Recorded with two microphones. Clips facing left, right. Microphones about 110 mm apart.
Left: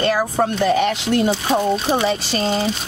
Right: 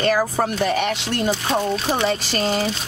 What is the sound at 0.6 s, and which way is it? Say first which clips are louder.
Speech: left 4 dB; centre (ahead or behind).